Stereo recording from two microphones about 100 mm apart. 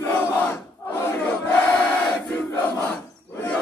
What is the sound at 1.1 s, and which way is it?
Crowd, 15° left (ahead or behind).